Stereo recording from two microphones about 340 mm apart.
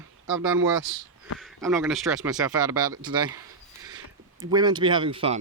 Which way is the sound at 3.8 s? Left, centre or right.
Centre.